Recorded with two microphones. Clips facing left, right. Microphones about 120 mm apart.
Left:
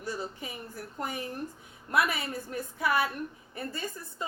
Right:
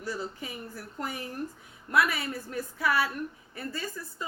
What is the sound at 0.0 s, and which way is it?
A woman's voice, 20° left (ahead or behind).